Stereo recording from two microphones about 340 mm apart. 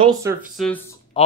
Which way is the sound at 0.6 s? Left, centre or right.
Centre.